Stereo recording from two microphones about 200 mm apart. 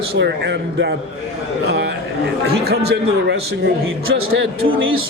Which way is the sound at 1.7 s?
60° right (ahead or behind).